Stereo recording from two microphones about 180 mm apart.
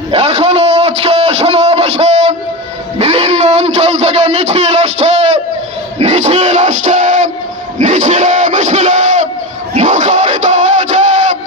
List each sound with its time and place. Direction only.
0.1 s a sound: 35° right (ahead or behind)
5.9 s music: 40° right (ahead or behind)
7.8 s battle cry: 45° right (ahead or behind)
9.8 s music: 45° right (ahead or behind)